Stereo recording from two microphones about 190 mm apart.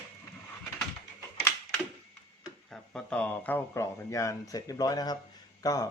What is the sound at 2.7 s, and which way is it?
Speech, 5° left (ahead or behind).